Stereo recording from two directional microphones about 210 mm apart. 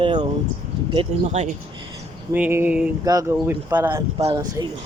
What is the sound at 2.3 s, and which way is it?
Speech, 10° right (ahead or behind).